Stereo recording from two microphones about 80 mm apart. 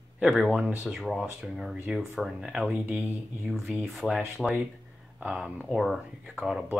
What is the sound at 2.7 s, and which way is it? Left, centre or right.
Speech, right.